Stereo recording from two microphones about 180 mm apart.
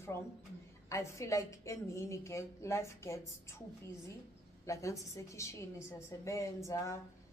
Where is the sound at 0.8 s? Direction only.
15° left (ahead or behind).